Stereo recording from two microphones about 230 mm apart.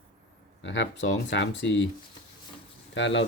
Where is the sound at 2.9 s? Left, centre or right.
Left.